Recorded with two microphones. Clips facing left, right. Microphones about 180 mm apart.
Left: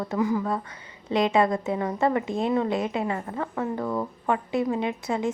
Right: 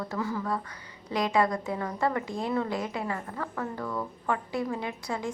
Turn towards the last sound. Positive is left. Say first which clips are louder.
# left 6 dB
turn(degrees=20)  # may be behind; listen again after turning